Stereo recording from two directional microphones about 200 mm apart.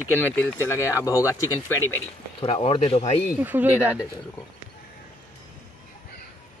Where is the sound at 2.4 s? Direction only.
30° left (ahead or behind).